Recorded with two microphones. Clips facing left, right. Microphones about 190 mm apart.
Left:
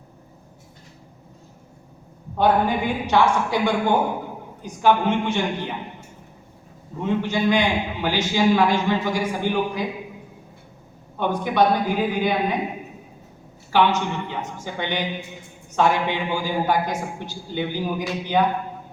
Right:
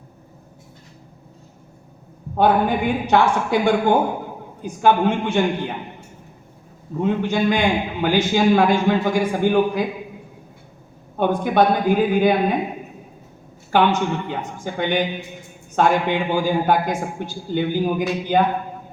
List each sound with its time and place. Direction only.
2.4 s a man's voice: 55° right (ahead or behind)
7.0 s a man's voice: 55° right (ahead or behind)
11.2 s a man's voice: 50° right (ahead or behind)
13.7 s a man's voice: 50° right (ahead or behind)